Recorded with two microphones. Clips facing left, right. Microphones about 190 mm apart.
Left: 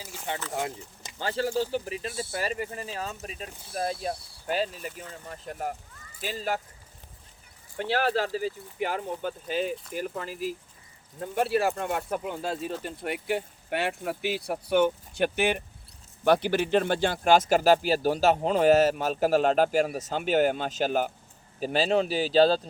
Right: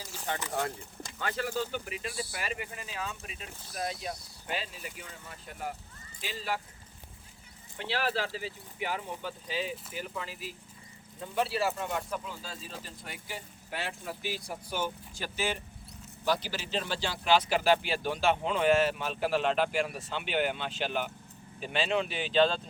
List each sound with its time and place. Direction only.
0.5 s speech: 15° left (ahead or behind)
1.2 s speech: 30° left (ahead or behind)
2.4 s speech: 35° left (ahead or behind)
7.8 s speech: 45° left (ahead or behind)